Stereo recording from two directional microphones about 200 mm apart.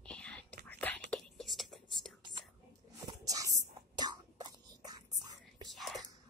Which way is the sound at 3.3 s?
15° right (ahead or behind).